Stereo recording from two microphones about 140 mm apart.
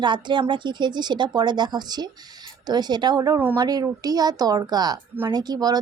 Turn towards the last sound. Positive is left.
turn(degrees=-30)  # may be behind; listen again after turning